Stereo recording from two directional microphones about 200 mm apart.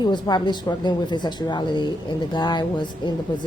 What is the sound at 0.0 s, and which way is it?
A woman's voice, 20° left (ahead or behind).